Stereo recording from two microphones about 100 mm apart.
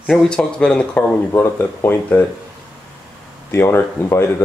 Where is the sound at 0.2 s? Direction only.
10° left (ahead or behind).